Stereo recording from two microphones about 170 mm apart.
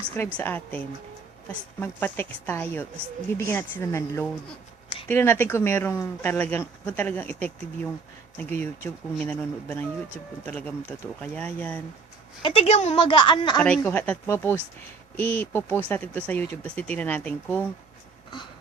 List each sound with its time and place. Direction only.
0.3 s speech: 10° left (ahead or behind)
12.4 s a woman's voice: 30° left (ahead or behind)
13.6 s speech: 5° left (ahead or behind)